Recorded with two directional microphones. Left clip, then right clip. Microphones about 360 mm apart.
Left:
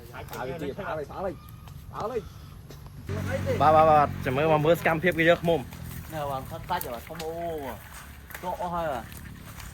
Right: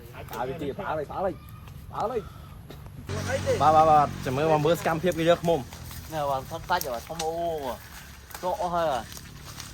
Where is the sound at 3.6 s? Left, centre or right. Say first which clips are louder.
Even; centre.